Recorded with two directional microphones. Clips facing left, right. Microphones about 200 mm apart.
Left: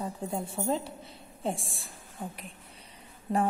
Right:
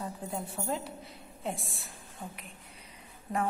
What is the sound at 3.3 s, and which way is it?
Speech, 25° left (ahead or behind).